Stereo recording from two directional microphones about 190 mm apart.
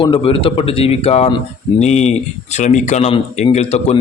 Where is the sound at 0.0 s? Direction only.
25° left (ahead or behind).